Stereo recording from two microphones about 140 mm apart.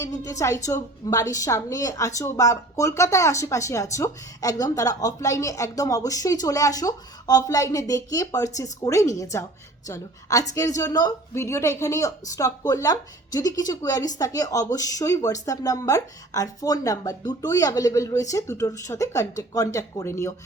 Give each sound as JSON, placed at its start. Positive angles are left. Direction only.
{"t": 0.0, "sound": "a woman's voice", "side_deg": 20}